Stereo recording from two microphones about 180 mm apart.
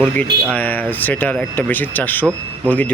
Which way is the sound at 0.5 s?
10° left (ahead or behind).